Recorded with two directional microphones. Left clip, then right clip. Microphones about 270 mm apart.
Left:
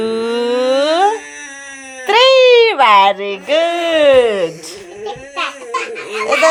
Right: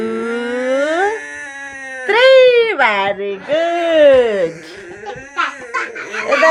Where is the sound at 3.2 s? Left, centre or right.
Left.